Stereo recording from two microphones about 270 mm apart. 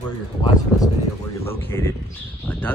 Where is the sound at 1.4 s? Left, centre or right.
Centre.